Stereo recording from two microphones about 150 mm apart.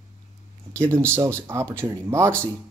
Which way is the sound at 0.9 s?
15° right (ahead or behind).